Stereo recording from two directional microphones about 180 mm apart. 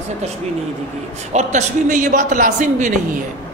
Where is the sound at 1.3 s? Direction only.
45° right (ahead or behind).